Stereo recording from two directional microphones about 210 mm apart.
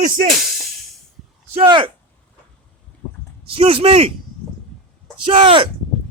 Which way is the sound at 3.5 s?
25° right (ahead or behind).